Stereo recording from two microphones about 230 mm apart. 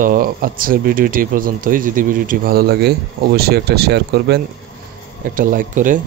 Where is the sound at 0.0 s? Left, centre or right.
Right.